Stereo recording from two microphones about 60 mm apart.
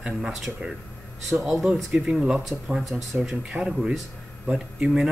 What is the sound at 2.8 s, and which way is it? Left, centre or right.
Speech, centre.